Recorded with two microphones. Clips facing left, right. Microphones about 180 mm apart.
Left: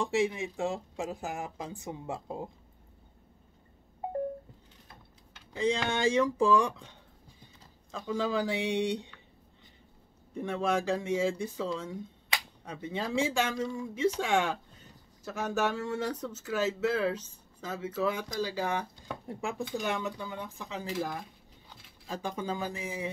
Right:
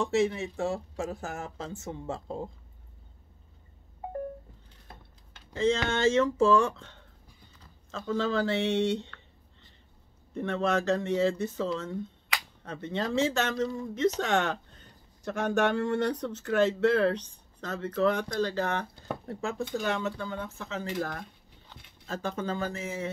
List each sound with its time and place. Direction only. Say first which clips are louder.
0.0 s speech: right 2 dB; 15° left (ahead or behind)
5.6 s speech: right 3 dB; 15° left (ahead or behind)
10.3 s speech: right 2 dB; 10° left (ahead or behind)
19.8 s speech: right 3 dB; 15° left (ahead or behind)
21.2 s speech: right 2 dB; 5° left (ahead or behind)